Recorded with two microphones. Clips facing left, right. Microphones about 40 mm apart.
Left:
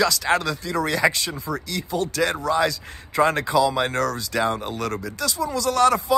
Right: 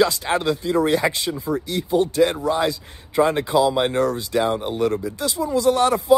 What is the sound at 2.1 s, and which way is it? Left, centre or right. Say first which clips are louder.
Speech: right 5 dB; left.